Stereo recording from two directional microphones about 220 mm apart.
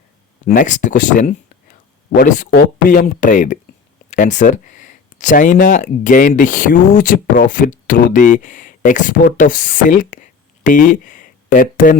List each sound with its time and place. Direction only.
0.4 s speech: 35° left (ahead or behind)